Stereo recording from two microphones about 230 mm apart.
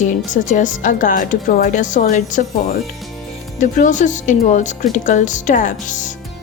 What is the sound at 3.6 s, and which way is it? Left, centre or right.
Speech, left.